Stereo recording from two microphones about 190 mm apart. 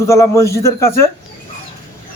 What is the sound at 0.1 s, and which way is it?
Speech, 15° left (ahead or behind).